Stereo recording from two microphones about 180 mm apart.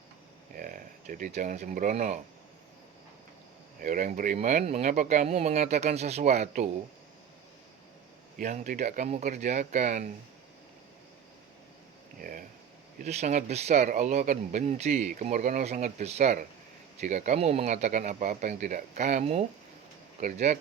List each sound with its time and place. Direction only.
0.5 s speech: 50° right (ahead or behind)
3.8 s speech: 50° right (ahead or behind)
8.4 s speech: 45° right (ahead or behind)
12.2 s a sound: 50° right (ahead or behind)
13.0 s speech: 40° right (ahead or behind)